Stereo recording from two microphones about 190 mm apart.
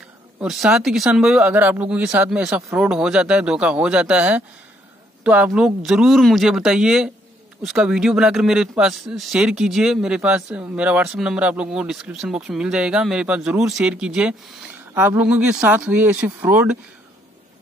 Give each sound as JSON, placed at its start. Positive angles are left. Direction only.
{"t": 0.4, "sound": "speech", "side_deg": -5}